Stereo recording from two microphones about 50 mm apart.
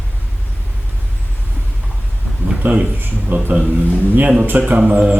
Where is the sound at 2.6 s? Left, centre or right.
Right.